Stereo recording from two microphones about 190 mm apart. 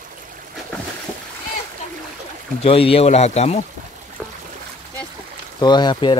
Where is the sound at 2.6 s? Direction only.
30° left (ahead or behind).